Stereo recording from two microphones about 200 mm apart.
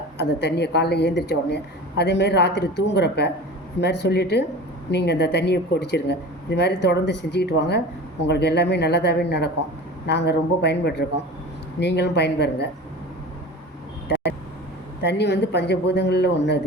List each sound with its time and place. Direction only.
0.2 s a woman's voice: 60° left (ahead or behind)
15.0 s a woman's voice: 60° left (ahead or behind)